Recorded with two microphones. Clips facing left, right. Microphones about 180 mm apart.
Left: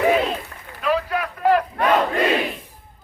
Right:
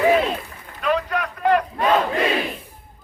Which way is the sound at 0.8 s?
Centre (ahead or behind).